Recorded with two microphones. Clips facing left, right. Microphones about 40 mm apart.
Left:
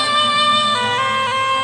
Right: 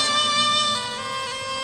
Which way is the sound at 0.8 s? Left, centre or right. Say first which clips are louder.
Left 11 dB; left.